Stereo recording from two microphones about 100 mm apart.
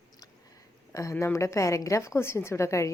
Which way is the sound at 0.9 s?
30° left (ahead or behind).